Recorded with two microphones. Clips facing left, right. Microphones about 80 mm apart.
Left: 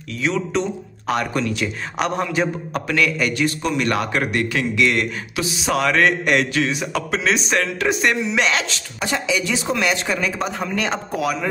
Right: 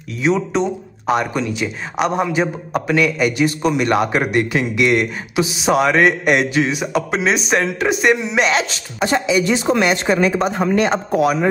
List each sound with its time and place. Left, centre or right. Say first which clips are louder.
0.2 s speech: right 4 dB; centre
9.0 s speech: right 6 dB; right
10.9 s speech: right 7 dB; centre